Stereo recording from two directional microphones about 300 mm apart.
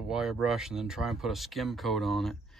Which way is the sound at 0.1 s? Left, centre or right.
Centre.